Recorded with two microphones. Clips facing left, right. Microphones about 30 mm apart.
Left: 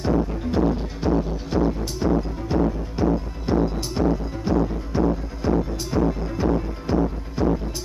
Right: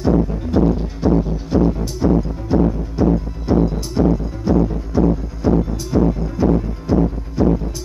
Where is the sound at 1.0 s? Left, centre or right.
Centre.